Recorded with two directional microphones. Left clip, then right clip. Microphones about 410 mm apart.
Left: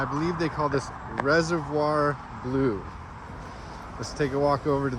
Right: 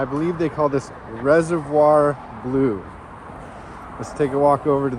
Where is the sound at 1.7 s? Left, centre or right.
Right.